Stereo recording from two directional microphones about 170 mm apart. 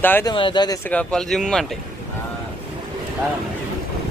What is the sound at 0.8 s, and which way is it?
Speech, 10° left (ahead or behind).